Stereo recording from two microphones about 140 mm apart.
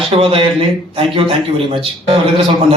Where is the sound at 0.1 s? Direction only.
40° right (ahead or behind).